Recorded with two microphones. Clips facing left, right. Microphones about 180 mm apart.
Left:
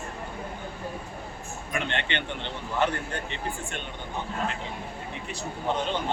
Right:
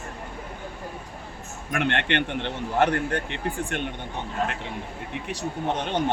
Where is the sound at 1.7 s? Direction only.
60° right (ahead or behind).